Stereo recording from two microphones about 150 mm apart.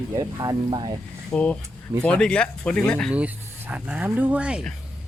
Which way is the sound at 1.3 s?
10° left (ahead or behind).